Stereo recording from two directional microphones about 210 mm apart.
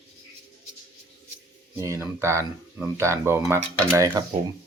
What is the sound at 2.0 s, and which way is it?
Speech, 15° right (ahead or behind).